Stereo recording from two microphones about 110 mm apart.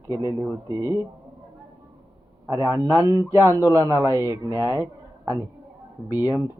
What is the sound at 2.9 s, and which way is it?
Speech, 25° right (ahead or behind).